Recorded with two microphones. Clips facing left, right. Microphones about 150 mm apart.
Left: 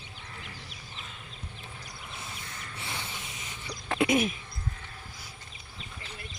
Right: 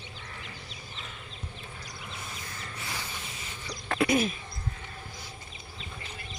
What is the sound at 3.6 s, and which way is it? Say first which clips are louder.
Throat clearing: even; 20° left (ahead or behind).